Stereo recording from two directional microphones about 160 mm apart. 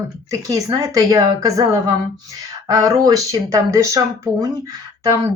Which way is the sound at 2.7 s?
20° right (ahead or behind).